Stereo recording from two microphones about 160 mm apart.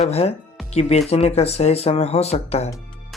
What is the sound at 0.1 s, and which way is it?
Speech, 40° left (ahead or behind).